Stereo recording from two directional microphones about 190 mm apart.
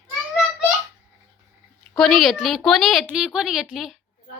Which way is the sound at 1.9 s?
Centre (ahead or behind).